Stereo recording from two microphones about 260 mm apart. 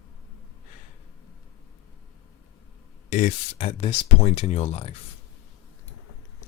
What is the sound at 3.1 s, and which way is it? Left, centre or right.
Speech, left.